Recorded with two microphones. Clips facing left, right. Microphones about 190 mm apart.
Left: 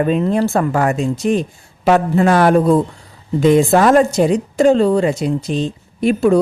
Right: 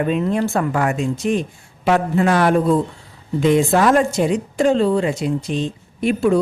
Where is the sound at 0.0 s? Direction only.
35° left (ahead or behind).